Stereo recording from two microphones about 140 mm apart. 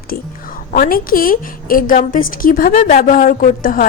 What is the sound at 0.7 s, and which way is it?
A woman's voice, 80° left.